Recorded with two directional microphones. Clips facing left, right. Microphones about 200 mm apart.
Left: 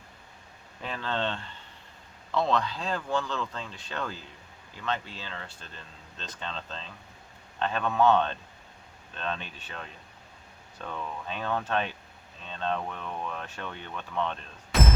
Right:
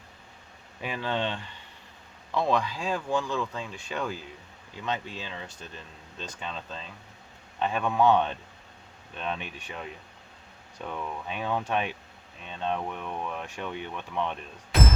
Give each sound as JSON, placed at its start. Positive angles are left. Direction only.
{"t": 0.8, "sound": "speech", "side_deg": -15}